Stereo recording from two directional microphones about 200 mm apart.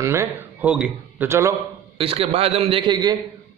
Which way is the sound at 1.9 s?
30° right (ahead or behind).